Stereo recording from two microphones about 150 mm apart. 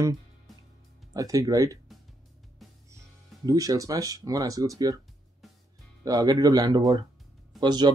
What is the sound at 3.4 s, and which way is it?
Speech, 25° right (ahead or behind).